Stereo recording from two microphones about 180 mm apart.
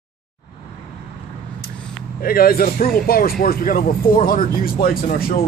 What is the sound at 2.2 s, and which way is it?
Speech, 55° left (ahead or behind).